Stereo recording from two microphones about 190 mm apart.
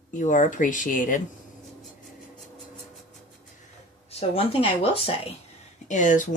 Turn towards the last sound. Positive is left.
turn(degrees=40)  # may be behind; listen again after turning